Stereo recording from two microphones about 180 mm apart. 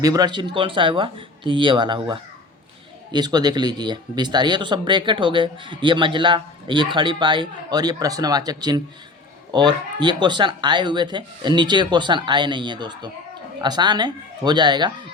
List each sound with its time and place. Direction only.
0.0 s speech: 20° right (ahead or behind)